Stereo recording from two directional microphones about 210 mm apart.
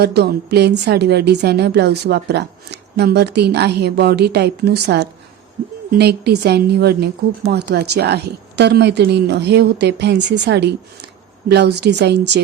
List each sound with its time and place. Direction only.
0.0 s a woman's voice: 50° right (ahead or behind)